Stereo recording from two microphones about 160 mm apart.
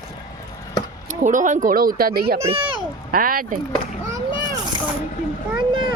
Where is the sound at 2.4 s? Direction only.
35° right (ahead or behind).